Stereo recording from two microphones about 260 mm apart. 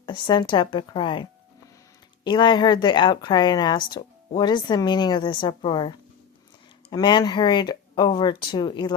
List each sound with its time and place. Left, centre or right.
0.0 s a woman's voice: centre